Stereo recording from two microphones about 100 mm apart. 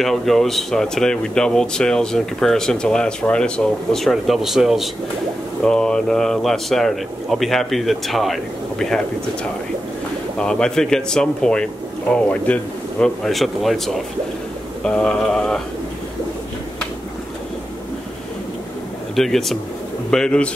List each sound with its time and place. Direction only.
0.0 s speech: centre (ahead or behind)
19.1 s speech: centre (ahead or behind)